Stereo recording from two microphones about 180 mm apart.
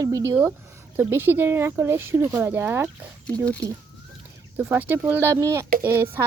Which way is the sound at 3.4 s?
5° left (ahead or behind).